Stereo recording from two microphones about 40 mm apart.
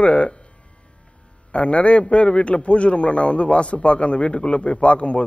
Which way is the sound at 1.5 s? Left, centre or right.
Left.